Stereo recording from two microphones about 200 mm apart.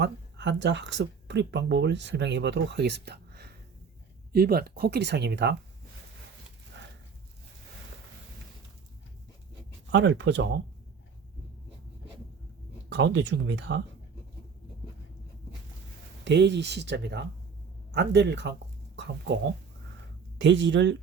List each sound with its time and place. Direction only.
0.0 s speech: 60° right (ahead or behind)
6.8 s a sound: 60° right (ahead or behind)
9.9 s speech: 65° right (ahead or behind)
12.9 s speech: 60° right (ahead or behind)
16.2 s speech: 60° right (ahead or behind)
20.4 s speech: 65° right (ahead or behind)